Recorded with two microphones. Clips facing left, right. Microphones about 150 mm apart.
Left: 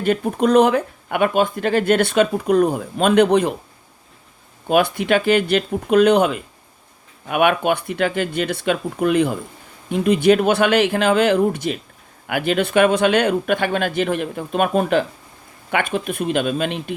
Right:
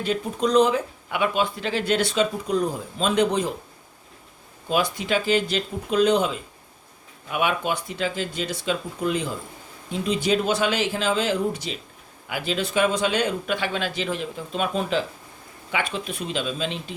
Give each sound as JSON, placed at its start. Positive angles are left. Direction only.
{"t": 0.0, "sound": "speech", "side_deg": 55}
{"t": 4.7, "sound": "speech", "side_deg": 60}